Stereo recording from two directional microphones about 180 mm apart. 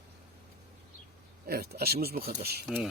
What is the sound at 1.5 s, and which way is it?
Speech, 60° right (ahead or behind).